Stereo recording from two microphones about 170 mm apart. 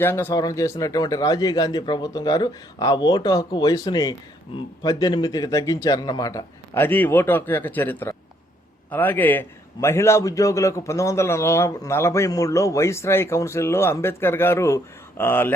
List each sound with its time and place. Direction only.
0.0 s a man's voice: 15° left (ahead or behind)